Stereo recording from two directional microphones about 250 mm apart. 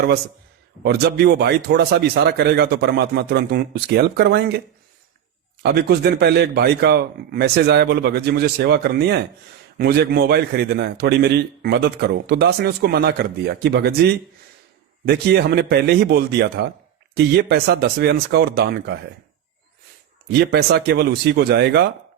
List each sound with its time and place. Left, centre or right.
0.9 s a man's voice: right
5.6 s a man's voice: right
20.4 s a man's voice: right